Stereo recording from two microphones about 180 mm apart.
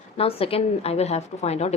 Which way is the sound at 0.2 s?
30° left (ahead or behind).